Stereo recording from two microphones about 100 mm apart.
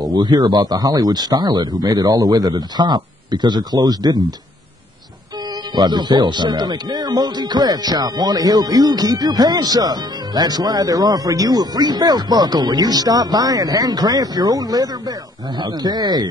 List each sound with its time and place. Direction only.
0.0 s speech: 45° right (ahead or behind)
5.8 s speech: 45° right (ahead or behind)